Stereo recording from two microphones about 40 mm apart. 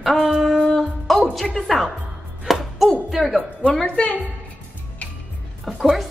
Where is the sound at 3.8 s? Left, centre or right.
Left.